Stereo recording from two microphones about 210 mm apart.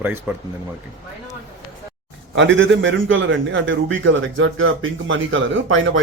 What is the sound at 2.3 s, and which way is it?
A man's voice, 60° right (ahead or behind).